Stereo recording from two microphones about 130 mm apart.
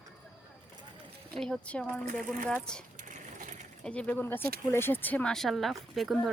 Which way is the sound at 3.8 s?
10° left (ahead or behind).